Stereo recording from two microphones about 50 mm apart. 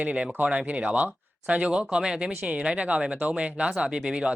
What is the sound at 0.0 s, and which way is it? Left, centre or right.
Speech, right.